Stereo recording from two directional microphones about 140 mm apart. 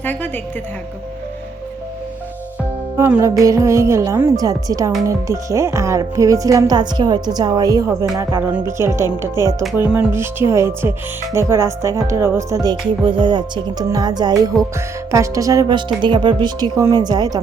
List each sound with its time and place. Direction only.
0.0 s a woman's voice: 10° left (ahead or behind)
3.0 s speech: 20° right (ahead or behind)
8.4 s speech: 15° right (ahead or behind)
9.3 s speech: 25° left (ahead or behind)
9.6 s speech: 15° right (ahead or behind)
13.1 s a woman's voice: 35° right (ahead or behind)